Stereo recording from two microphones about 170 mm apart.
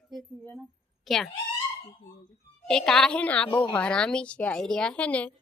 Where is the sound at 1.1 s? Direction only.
Centre (ahead or behind).